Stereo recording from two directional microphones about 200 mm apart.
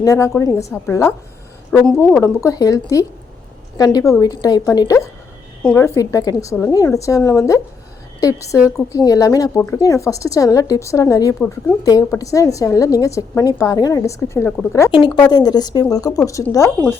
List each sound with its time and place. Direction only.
0.0 s a woman's voice: 15° left (ahead or behind)
2.2 s a woman's voice: 15° left (ahead or behind)
8.5 s a woman's voice: 5° right (ahead or behind)
8.9 s a woman's voice: 15° left (ahead or behind)